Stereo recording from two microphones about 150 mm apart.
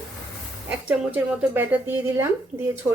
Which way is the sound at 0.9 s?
10° right (ahead or behind).